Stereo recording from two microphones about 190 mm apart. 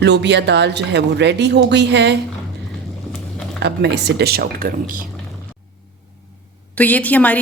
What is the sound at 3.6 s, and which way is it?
Speech, 60° right (ahead or behind).